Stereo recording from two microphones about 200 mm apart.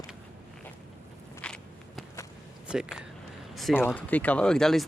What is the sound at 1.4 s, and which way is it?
Walk, 5° left (ahead or behind).